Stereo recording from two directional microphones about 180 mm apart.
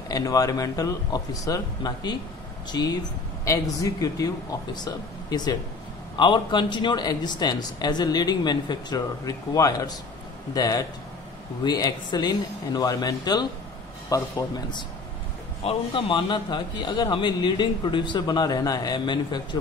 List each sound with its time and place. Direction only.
0.1 s a man's voice: 20° left (ahead or behind)